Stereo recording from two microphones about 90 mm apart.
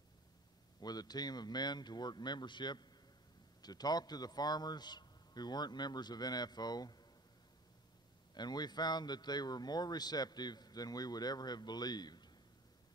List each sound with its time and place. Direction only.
0.7 s speech: 50° left (ahead or behind)
8.4 s speech: 50° left (ahead or behind)